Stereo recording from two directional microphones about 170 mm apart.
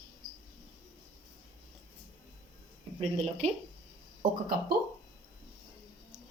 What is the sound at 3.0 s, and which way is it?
Speech, 40° right (ahead or behind).